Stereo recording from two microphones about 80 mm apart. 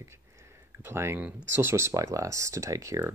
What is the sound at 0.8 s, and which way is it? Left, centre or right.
Speech, right.